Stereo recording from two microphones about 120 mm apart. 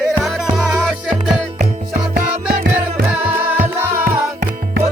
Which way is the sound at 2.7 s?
10° right (ahead or behind).